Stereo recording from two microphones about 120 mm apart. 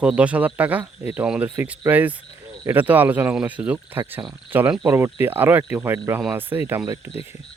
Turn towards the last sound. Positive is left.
turn(degrees=-20)  # may be behind; listen again after turning